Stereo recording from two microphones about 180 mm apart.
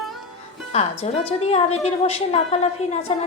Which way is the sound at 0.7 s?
35° left (ahead or behind).